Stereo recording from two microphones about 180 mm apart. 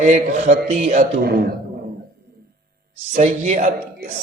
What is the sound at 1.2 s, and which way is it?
Speech, 60° right (ahead or behind).